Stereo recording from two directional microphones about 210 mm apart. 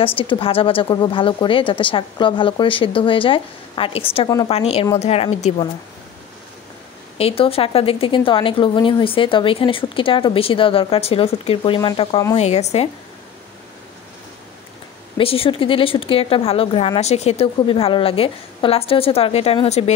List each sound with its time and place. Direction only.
0.0 s speech: 25° left (ahead or behind)
4.6 s speech: 30° left (ahead or behind)
7.2 s speech: 30° left (ahead or behind)
12.4 s speech: 30° left (ahead or behind)
15.1 s speech: 25° left (ahead or behind)